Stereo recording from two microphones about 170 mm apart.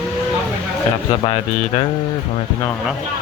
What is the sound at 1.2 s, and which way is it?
Speech, 35° left (ahead or behind).